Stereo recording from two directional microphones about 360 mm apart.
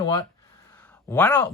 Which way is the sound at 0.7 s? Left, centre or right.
Centre.